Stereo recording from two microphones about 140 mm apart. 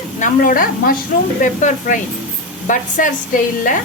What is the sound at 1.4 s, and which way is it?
Speech, 65° left (ahead or behind).